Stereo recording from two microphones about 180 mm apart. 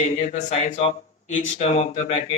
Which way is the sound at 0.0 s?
40° left (ahead or behind).